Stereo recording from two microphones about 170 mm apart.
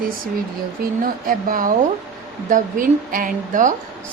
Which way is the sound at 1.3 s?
55° right (ahead or behind).